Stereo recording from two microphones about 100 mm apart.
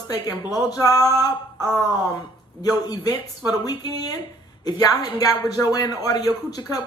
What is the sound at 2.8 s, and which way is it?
Speech, 40° left (ahead or behind).